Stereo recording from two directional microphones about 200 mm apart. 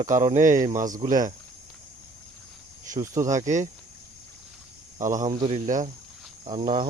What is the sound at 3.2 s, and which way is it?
Speech, 35° right (ahead or behind).